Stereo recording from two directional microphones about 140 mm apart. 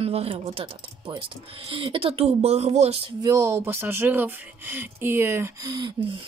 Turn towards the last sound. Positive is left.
turn(degrees=-30)  # may be behind; listen again after turning